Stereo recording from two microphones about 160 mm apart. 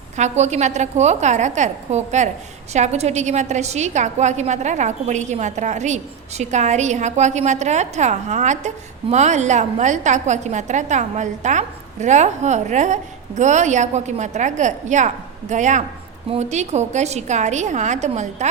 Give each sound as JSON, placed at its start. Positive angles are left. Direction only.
{"t": 0.2, "sound": "a woman's voice", "side_deg": -45}